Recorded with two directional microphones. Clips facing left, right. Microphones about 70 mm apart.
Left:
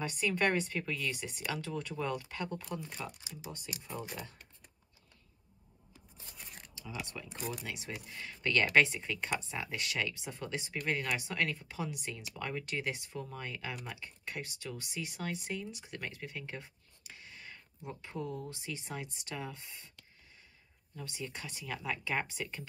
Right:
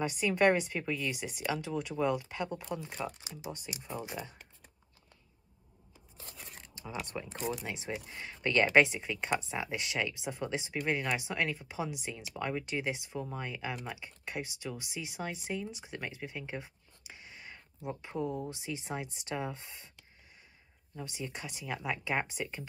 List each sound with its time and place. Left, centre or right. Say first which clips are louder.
0.0 s speech: right 5 dB; centre
2.9 s speech: right 5 dB; right
3.8 s speech: right 3 dB; centre
7.2 s speech: right 5 dB; right
20.9 s speech: right 2 dB; centre